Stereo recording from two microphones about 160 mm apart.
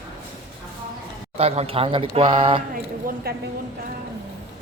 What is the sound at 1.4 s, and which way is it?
A man's voice, 40° right (ahead or behind).